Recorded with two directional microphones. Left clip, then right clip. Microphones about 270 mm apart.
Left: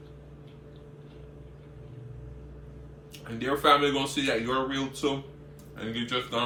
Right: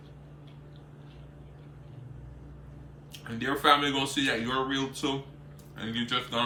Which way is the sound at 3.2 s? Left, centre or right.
Centre.